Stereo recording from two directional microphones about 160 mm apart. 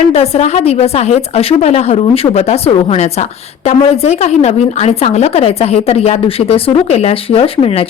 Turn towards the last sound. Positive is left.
turn(degrees=35)  # may be behind; listen again after turning